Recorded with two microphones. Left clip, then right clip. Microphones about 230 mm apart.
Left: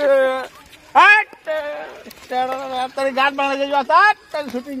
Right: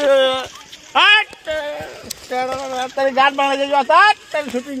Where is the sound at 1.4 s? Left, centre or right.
Right.